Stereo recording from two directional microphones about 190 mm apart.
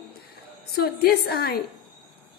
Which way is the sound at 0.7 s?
55° left (ahead or behind).